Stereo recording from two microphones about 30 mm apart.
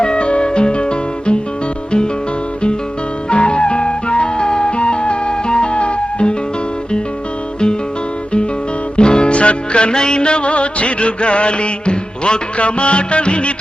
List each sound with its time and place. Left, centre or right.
0.0 s music: left
3.2 s music: left
9.0 s music: left
9.9 s music: left